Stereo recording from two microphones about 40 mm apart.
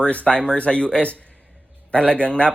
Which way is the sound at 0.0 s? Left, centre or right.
Left.